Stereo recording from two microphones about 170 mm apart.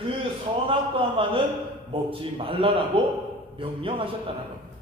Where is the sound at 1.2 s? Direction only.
30° right (ahead or behind).